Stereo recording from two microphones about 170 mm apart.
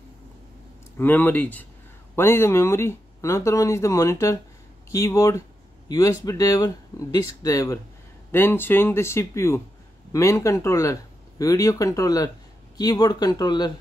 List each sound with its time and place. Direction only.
0.9 s speech: 10° left (ahead or behind)